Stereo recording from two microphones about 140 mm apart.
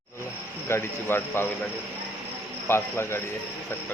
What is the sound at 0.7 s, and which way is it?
Speech, 15° left (ahead or behind).